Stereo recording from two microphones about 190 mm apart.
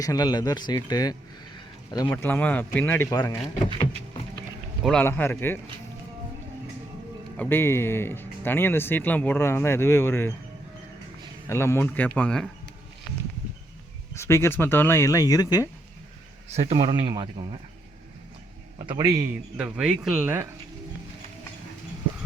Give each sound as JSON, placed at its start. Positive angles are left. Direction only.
{"t": 0.0, "sound": "speech", "side_deg": 20}
{"t": 1.5, "sound": "a sound", "side_deg": 20}
{"t": 2.0, "sound": "speech", "side_deg": 10}
{"t": 4.8, "sound": "a man's voice", "side_deg": 0}
{"t": 7.3, "sound": "speech", "side_deg": 10}
{"t": 11.4, "sound": "speech", "side_deg": 15}
{"t": 14.2, "sound": "speech", "side_deg": 15}
{"t": 16.5, "sound": "speech", "side_deg": -35}
{"t": 18.9, "sound": "speech", "side_deg": -20}
{"t": 19.5, "sound": "speech", "side_deg": -5}